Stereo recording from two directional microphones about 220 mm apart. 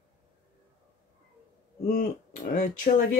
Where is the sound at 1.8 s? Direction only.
35° left (ahead or behind).